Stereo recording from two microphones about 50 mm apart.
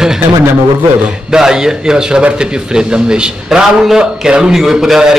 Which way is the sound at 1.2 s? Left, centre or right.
Centre.